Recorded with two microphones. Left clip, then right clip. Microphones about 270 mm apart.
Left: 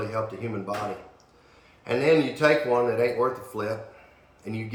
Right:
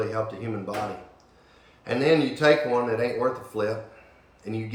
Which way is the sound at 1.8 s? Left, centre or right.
Centre.